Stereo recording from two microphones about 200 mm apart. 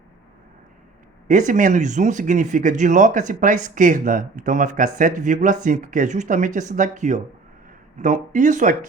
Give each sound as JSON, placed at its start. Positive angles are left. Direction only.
{"t": 1.3, "sound": "speech", "side_deg": -40}